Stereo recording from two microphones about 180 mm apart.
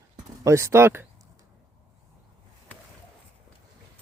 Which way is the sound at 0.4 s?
15° right (ahead or behind).